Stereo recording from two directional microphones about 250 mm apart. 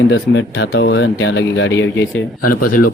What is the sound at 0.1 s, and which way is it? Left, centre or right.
Speech, left.